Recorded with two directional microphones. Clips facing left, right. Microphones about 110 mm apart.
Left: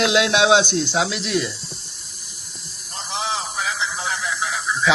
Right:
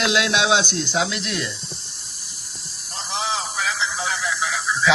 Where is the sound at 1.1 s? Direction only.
5° left (ahead or behind).